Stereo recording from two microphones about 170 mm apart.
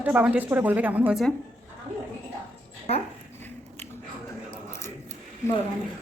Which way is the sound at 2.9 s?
35° left (ahead or behind).